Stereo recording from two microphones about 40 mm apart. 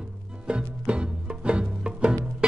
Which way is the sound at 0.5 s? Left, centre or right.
Right.